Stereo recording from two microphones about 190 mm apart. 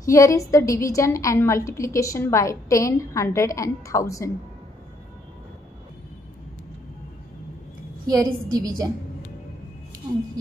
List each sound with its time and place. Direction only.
0.0 s a woman's voice: 15° left (ahead or behind)
8.1 s a woman's voice: 20° right (ahead or behind)